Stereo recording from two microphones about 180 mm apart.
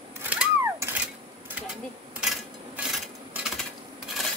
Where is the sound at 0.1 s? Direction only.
10° right (ahead or behind).